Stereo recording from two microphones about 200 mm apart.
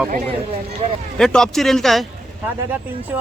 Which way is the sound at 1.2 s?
5° left (ahead or behind).